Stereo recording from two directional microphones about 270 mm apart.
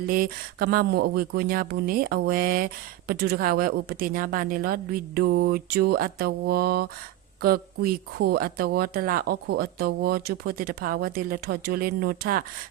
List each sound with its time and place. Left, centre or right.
0.1 s speech: right